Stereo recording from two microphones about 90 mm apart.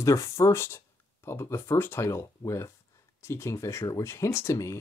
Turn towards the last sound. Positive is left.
turn(degrees=35)  # may be behind; listen again after turning